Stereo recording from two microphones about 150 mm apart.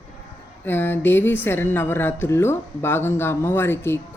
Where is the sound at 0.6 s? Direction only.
15° left (ahead or behind).